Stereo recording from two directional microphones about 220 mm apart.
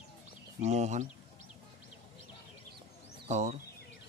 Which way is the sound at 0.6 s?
30° right (ahead or behind).